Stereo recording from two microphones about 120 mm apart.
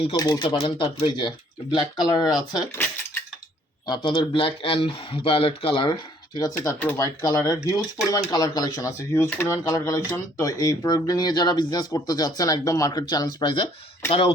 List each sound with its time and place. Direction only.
0.2 s speech: 35° left (ahead or behind)
3.8 s speech: 40° left (ahead or behind)
14.1 s speech: 55° left (ahead or behind)